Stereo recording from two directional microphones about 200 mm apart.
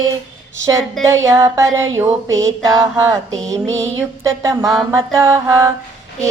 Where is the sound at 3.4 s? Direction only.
15° right (ahead or behind).